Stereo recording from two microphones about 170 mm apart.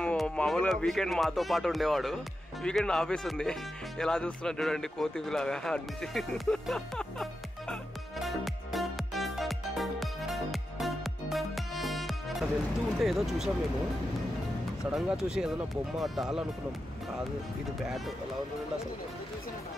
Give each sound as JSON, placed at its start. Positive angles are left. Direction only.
{"t": 0.0, "sound": "a man's voice", "side_deg": 5}
{"t": 8.2, "sound": "music", "side_deg": 0}
{"t": 13.0, "sound": "speech", "side_deg": 0}
{"t": 14.9, "sound": "a man's voice", "side_deg": -5}
{"t": 17.8, "sound": "a man's voice", "side_deg": 0}